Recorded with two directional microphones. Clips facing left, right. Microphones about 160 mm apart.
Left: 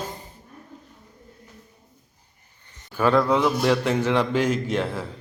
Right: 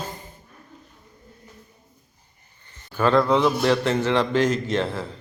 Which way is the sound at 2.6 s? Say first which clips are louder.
Even; 10° left (ahead or behind).